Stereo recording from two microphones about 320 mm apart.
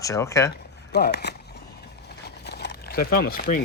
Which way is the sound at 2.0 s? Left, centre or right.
Left.